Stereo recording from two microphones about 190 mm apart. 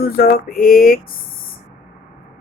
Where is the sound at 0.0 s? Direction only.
50° left (ahead or behind).